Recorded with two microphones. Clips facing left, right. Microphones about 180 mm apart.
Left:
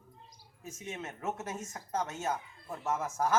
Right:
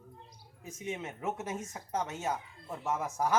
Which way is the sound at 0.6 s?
15° right (ahead or behind).